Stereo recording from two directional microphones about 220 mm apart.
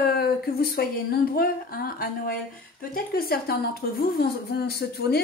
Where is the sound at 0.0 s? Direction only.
45° left (ahead or behind).